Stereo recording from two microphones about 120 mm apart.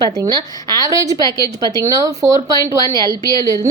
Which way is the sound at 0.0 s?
35° right (ahead or behind).